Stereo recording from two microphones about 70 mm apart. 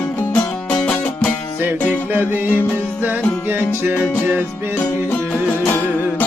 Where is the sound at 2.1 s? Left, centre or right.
Right.